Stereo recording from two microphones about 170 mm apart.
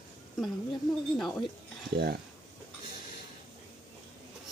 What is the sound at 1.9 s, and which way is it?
Speech, 70° right (ahead or behind).